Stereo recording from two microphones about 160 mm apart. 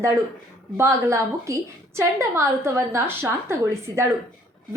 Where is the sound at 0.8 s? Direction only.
15° right (ahead or behind).